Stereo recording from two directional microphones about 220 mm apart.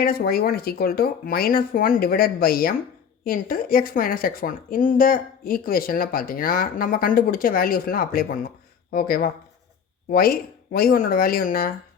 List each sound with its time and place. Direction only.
0.0 s speech: 45° left (ahead or behind)